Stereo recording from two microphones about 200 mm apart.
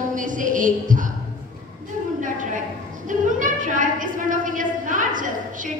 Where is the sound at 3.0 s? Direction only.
40° right (ahead or behind).